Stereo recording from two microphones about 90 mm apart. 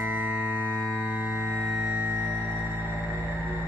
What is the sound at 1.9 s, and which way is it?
Music, 20° right (ahead or behind).